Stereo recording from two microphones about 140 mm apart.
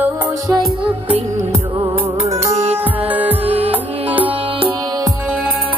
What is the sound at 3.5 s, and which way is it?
Music, 45° right (ahead or behind).